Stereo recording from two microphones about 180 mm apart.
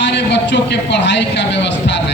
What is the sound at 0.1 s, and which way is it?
A man's voice, 75° left (ahead or behind).